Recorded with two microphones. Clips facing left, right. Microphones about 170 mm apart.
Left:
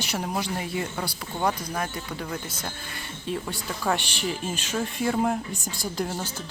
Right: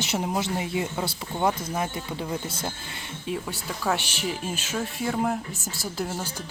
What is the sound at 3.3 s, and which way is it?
Speech, 10° right (ahead or behind).